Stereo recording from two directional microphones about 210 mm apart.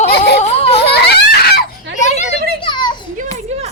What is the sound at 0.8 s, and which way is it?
Giggle, 50° left (ahead or behind).